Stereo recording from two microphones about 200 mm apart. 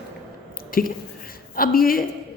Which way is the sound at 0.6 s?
45° left (ahead or behind).